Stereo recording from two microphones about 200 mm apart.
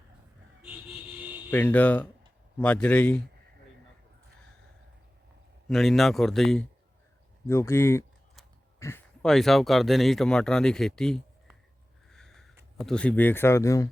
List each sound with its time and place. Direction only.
0.6 s a sound: 10° right (ahead or behind)
1.5 s speech: 5° left (ahead or behind)
5.6 s speech: centre (ahead or behind)
7.4 s speech: 15° left (ahead or behind)
12.1 s sniff: centre (ahead or behind)
12.7 s speech: 5° left (ahead or behind)